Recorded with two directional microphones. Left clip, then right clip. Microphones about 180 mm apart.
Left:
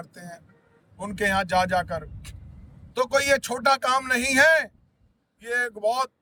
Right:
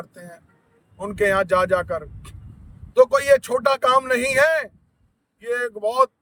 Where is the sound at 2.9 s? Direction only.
10° right (ahead or behind).